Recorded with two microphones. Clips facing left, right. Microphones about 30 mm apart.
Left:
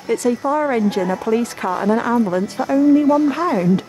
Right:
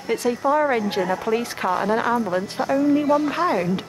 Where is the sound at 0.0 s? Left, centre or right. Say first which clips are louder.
Left 3 dB; centre.